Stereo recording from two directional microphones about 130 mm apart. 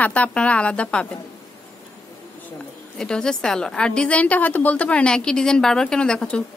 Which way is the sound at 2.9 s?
5° left (ahead or behind).